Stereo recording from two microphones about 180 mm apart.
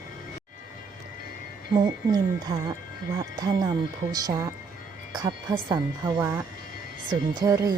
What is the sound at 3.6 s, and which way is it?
Speech, 20° right (ahead or behind).